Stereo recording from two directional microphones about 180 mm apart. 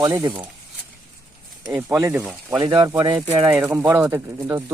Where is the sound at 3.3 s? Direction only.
10° right (ahead or behind).